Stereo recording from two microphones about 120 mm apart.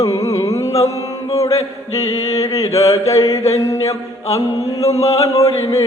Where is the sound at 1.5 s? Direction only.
60° left (ahead or behind).